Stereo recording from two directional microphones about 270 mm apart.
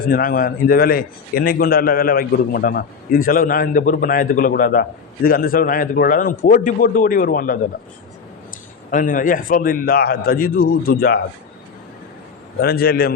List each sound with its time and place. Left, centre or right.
0.0 s a man's voice: left
8.9 s a man's voice: left
12.5 s a man's voice: left